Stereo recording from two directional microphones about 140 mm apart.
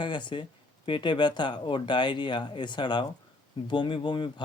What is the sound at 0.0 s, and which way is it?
Speech, 35° left (ahead or behind).